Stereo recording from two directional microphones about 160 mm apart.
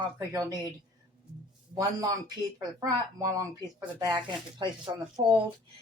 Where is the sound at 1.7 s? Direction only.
25° right (ahead or behind).